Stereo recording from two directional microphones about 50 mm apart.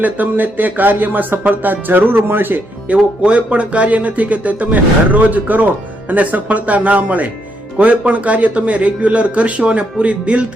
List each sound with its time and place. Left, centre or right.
0.0 s speech: right
2.9 s speech: right